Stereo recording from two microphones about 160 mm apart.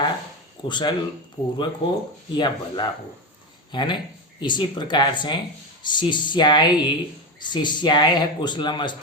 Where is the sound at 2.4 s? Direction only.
25° left (ahead or behind).